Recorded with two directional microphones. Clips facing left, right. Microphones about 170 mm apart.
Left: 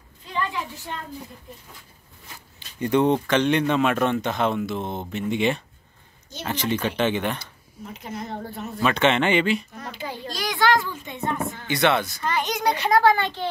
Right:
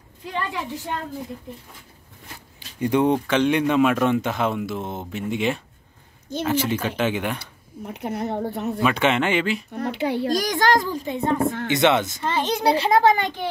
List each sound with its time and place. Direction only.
2.8 s speech: 10° right (ahead or behind)
7.8 s speech: 65° right (ahead or behind)
8.8 s speech: 10° right (ahead or behind)
9.8 s a child's voice: 65° right (ahead or behind)
10.2 s a child's voice: 45° right (ahead or behind)
11.6 s a child's voice: 20° right (ahead or behind)